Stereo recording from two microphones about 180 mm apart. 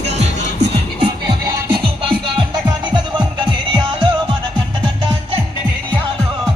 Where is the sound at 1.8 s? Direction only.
30° right (ahead or behind).